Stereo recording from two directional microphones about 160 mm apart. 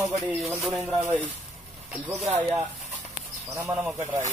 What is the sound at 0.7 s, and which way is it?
Speech, centre (ahead or behind).